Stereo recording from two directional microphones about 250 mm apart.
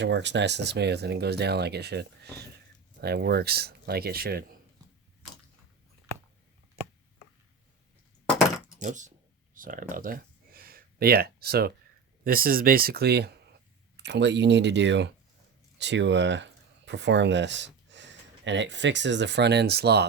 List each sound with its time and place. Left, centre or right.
0.0 s speech: right
8.8 s speech: right
9.6 s a sound: right
12.2 s speech: right